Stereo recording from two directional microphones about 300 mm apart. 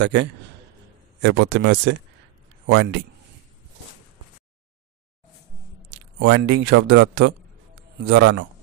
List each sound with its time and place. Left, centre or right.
0.0 s a man's voice: right
6.1 s speech: right